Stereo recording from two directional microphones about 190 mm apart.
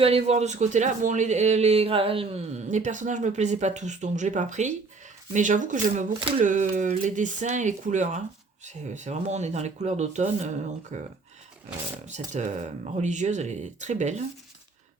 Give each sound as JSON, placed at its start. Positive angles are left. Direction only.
{"t": 0.0, "sound": "speech", "side_deg": -30}
{"t": 12.0, "sound": "speech", "side_deg": -40}